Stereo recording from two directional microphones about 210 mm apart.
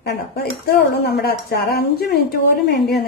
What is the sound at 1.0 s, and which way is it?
A woman's voice, 50° left (ahead or behind).